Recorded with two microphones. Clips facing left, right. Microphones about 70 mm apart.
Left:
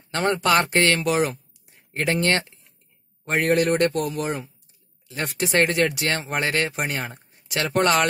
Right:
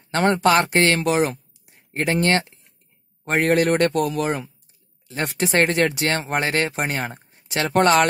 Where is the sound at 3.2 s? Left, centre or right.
Right.